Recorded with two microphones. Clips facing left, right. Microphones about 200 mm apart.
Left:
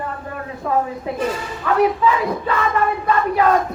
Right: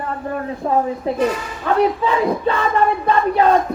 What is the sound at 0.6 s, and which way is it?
Speech, 30° right (ahead or behind).